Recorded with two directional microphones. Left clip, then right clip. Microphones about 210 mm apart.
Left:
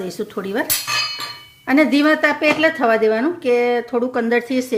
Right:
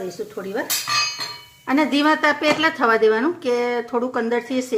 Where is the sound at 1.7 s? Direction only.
20° left (ahead or behind).